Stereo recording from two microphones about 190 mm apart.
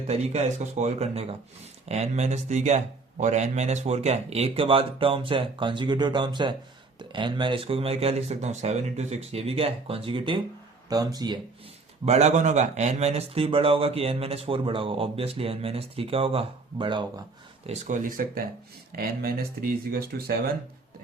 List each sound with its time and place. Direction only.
0.1 s speech: 35° right (ahead or behind)
12.0 s speech: 35° right (ahead or behind)
17.7 s speech: 40° right (ahead or behind)